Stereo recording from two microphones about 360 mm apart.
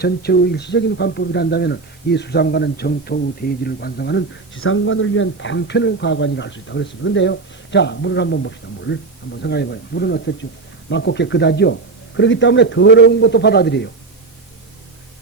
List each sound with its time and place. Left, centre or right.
0.0 s speech: left